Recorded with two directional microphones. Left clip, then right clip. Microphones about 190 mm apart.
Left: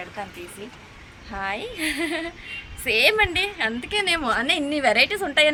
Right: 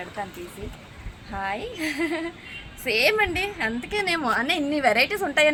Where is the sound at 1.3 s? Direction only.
15° left (ahead or behind).